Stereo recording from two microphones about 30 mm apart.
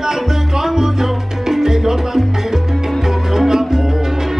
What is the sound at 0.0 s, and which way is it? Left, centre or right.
Salsa music, centre.